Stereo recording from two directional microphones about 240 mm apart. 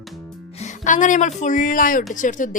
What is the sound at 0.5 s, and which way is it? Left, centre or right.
Speech, left.